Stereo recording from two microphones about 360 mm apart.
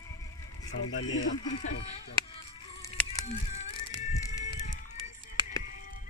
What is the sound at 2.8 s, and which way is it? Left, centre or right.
Music, centre.